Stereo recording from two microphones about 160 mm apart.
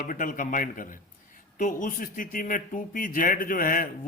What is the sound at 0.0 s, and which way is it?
A man's voice, 55° left (ahead or behind).